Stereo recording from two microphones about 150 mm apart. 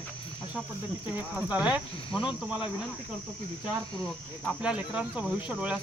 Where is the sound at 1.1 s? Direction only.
10° right (ahead or behind).